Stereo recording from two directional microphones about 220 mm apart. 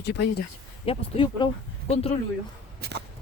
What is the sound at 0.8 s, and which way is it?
Speech, 25° left (ahead or behind).